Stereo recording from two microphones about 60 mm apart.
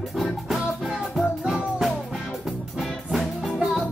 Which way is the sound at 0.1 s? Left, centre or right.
Centre.